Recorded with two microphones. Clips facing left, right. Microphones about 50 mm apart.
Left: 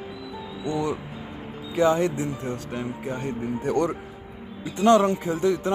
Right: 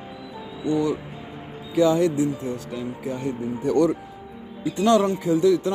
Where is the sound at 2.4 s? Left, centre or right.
Left.